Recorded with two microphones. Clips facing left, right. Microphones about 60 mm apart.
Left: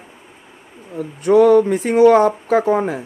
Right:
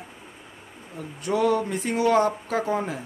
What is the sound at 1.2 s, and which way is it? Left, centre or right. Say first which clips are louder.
Speech: left 12 dB; left.